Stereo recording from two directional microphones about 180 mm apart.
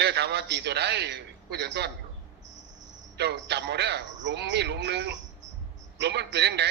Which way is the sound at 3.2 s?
70° right (ahead or behind).